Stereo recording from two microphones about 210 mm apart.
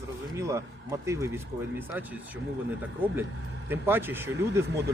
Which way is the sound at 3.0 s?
10° right (ahead or behind).